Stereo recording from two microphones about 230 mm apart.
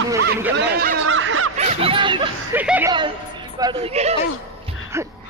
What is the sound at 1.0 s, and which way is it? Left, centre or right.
Snicker, right.